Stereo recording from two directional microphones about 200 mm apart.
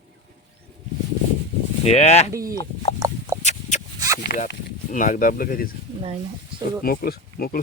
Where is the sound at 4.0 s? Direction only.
15° right (ahead or behind).